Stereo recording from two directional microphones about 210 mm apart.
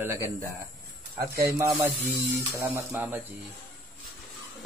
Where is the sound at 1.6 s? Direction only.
20° right (ahead or behind).